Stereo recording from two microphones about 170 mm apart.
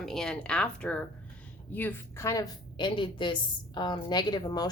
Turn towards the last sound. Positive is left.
turn(degrees=25)  # may be behind; listen again after turning